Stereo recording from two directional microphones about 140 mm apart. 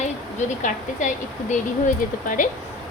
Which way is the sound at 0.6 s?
65° left (ahead or behind).